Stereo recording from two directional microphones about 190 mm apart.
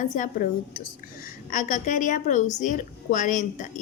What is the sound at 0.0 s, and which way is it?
A woman's voice, 45° left (ahead or behind).